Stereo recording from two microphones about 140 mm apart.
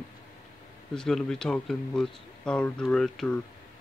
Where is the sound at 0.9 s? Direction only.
5° left (ahead or behind).